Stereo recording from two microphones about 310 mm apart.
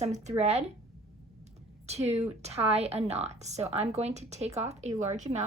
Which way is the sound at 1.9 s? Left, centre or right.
Centre.